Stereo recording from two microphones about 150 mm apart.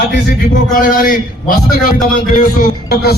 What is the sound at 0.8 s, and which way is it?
A man's voice, 70° left (ahead or behind).